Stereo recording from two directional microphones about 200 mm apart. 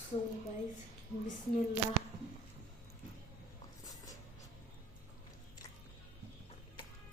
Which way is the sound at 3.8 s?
20° left (ahead or behind).